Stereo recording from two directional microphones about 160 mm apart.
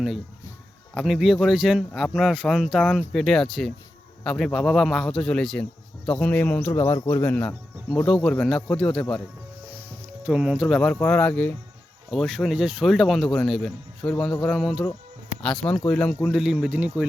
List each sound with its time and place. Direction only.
0.9 s speech: centre (ahead or behind)
10.2 s speech: 5° right (ahead or behind)